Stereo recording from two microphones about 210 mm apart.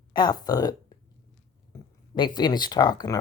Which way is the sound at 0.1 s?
20° left (ahead or behind).